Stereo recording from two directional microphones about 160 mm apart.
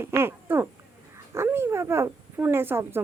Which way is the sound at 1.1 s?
15° right (ahead or behind).